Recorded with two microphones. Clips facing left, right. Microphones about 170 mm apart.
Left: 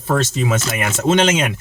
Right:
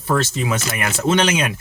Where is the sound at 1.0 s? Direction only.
20° left (ahead or behind).